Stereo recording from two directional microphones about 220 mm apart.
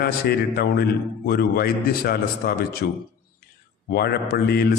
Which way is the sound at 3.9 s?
45° left (ahead or behind).